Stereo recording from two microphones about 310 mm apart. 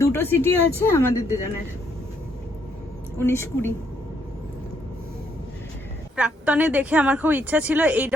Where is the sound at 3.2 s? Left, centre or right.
Centre.